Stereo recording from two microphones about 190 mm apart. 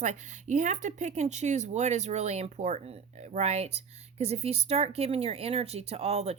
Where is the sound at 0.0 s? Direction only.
40° right (ahead or behind).